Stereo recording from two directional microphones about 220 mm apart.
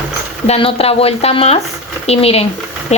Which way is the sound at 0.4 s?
25° left (ahead or behind).